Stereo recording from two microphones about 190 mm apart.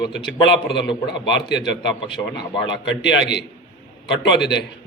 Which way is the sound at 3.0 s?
65° left (ahead or behind).